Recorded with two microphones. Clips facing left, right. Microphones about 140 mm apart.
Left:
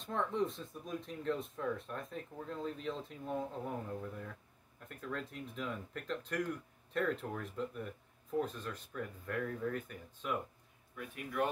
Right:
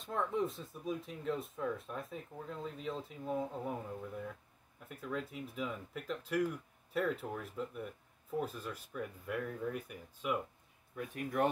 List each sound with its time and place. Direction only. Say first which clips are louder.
0.0 s speech: even; 5° right (ahead or behind)
11.0 s speech: right 3 dB; 45° right (ahead or behind)